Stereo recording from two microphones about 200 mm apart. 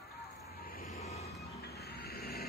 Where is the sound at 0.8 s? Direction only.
30° left (ahead or behind).